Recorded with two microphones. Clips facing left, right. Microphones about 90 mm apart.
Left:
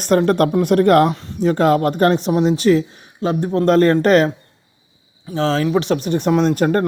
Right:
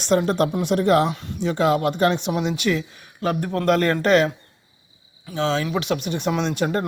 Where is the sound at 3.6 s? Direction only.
35° left (ahead or behind).